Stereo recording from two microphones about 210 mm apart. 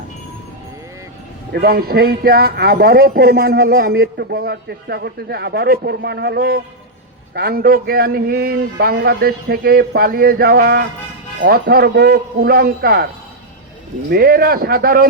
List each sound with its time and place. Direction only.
1.5 s speech: 45° right (ahead or behind)
14.1 s speech: 45° right (ahead or behind)